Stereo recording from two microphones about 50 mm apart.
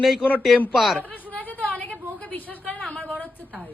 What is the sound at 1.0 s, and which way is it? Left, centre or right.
Chatter, left.